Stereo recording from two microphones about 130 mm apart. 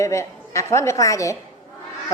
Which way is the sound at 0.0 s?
25° left (ahead or behind).